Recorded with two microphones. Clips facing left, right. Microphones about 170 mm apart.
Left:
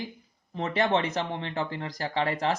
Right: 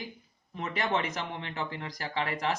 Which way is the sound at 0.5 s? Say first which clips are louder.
Left 5 dB; 30° left (ahead or behind).